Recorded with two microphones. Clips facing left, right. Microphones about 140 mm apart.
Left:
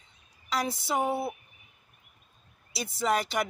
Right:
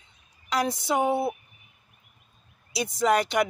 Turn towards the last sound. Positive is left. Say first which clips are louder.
# right 5 dB
turn(degrees=0)  # may be behind; listen again after turning